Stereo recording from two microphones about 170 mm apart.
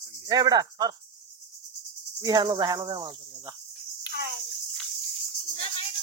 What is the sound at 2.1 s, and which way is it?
Cricket, 25° right (ahead or behind).